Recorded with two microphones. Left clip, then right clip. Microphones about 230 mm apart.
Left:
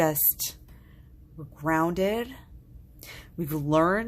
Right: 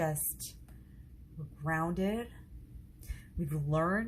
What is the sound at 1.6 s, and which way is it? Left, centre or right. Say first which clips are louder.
Speech: left 9 dB; left.